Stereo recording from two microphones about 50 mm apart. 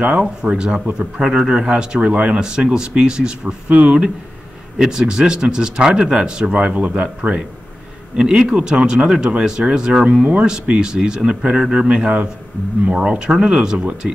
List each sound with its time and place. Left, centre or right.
0.0 s speech: right
3.6 s speech: right
4.7 s speech: centre